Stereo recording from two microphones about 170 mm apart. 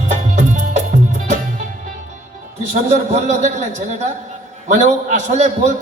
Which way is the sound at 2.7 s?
40° right (ahead or behind).